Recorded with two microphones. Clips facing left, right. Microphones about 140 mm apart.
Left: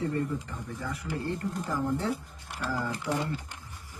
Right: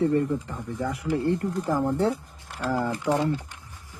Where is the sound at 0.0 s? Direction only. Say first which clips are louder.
Right 7 dB; 60° right (ahead or behind).